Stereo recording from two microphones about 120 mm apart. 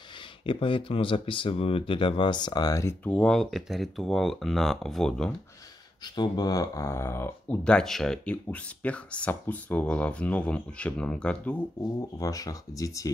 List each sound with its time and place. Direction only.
0.5 s speech: 45° left (ahead or behind); by 3.2 s 20° left (ahead or behind)
3.2 s speech: centre (ahead or behind)
6.1 s speech: 35° left (ahead or behind); by 7.5 s 20° left (ahead or behind)
7.6 s speech: 5° left (ahead or behind)
12.2 s speech: 30° left (ahead or behind)